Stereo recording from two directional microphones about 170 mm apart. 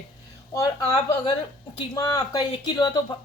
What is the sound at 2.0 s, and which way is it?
Speech, 20° left (ahead or behind).